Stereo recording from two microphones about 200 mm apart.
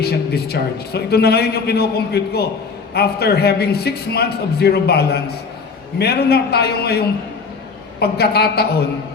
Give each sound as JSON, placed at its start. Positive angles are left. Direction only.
{"t": 0.0, "sound": "a man's voice", "side_deg": 50}